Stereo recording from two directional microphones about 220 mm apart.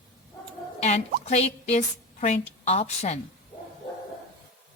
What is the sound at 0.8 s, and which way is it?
Speech, 30° left (ahead or behind).